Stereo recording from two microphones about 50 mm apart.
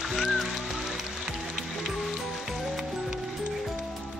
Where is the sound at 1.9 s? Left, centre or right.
Centre.